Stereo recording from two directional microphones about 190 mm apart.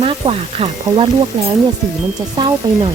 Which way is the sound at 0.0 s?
30° right (ahead or behind).